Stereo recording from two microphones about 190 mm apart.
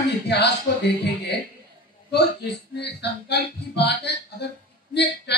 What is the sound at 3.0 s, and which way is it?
Speech, 60° left (ahead or behind).